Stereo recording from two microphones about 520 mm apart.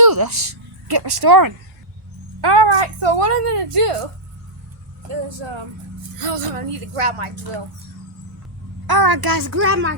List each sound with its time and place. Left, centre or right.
0.0 s a sound: right
0.9 s speech: right
2.4 s a woman's voice: right
5.4 s a woman's voice: right
8.9 s a child's voice: right